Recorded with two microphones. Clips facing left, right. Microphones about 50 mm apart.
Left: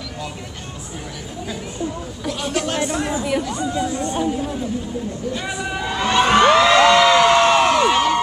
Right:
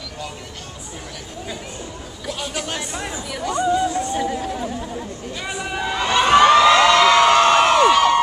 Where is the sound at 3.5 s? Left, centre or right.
Centre.